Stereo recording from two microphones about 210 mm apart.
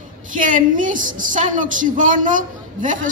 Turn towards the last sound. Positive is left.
turn(degrees=-40)  # may be behind; listen again after turning